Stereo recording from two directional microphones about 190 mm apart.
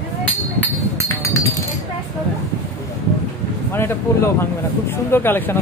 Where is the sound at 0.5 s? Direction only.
10° left (ahead or behind).